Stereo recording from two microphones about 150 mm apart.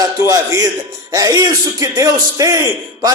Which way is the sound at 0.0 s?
25° right (ahead or behind).